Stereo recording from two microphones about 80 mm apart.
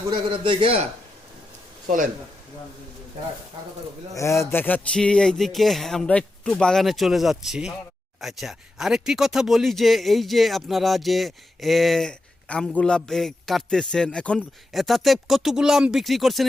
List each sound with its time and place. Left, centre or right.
0.1 s a man's voice: right
4.1 s a man's voice: left
4.9 s speech: centre
6.1 s speech: centre
12.5 s a man's voice: centre
14.7 s speech: centre